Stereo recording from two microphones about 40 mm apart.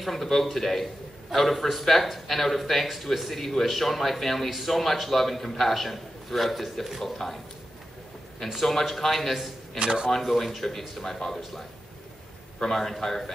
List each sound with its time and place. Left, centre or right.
0.0 s speech: centre
8.5 s speech: centre
9.8 s speech: centre
10.1 s speech: centre
12.6 s speech: centre